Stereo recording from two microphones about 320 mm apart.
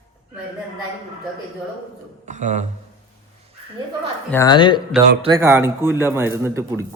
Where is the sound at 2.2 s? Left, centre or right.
Right.